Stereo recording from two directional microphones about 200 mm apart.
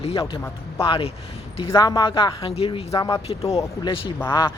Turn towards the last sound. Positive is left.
turn(degrees=20)  # may be behind; listen again after turning